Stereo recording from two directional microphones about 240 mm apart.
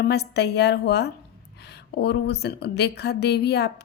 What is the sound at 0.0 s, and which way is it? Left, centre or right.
A woman's voice, left.